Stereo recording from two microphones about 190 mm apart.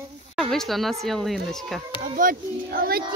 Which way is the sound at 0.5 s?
Centre (ahead or behind).